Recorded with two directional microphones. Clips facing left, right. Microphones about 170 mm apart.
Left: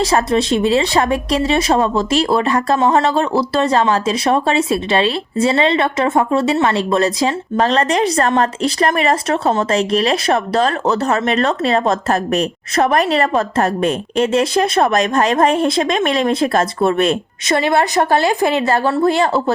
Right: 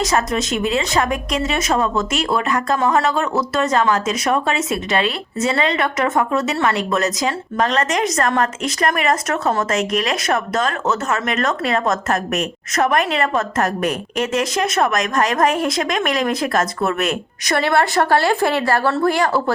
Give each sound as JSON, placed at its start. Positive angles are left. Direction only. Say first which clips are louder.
{"t": 0.0, "sound": "speech", "louder": "left 4 dB", "side_deg": 30}